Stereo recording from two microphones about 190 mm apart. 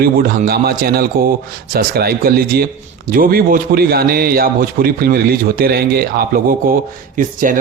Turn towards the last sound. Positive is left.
turn(degrees=-45)  # may be behind; listen again after turning